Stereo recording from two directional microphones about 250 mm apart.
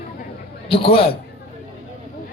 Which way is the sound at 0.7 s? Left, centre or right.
Left.